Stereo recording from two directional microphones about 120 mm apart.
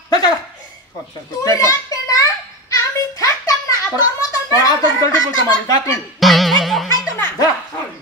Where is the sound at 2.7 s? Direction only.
25° left (ahead or behind).